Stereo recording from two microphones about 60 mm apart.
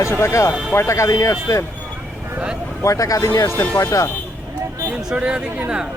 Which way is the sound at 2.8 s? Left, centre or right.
Left.